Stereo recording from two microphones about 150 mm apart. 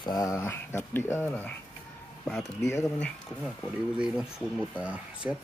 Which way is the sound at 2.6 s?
20° left (ahead or behind).